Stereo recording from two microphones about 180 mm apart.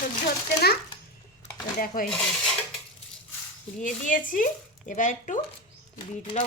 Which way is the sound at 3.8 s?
45° left (ahead or behind).